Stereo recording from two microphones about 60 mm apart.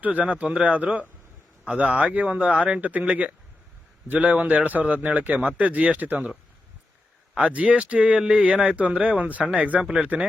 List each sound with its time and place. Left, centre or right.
0.0 s speech: right
7.5 s speech: right